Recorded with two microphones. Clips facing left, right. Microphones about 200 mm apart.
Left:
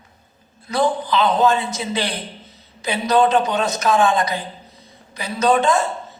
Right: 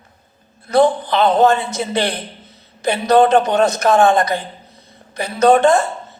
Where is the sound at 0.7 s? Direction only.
55° right (ahead or behind).